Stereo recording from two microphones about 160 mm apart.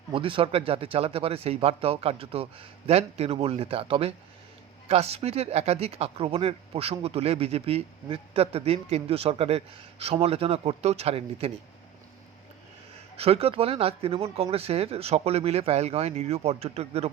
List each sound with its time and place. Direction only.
0.1 s speech: 30° right (ahead or behind)
13.1 s speech: 40° right (ahead or behind)